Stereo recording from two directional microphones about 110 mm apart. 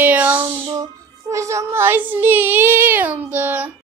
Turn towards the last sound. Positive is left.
turn(degrees=-15)  # may be behind; listen again after turning